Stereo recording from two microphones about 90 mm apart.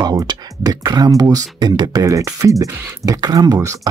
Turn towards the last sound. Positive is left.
turn(degrees=-40)  # may be behind; listen again after turning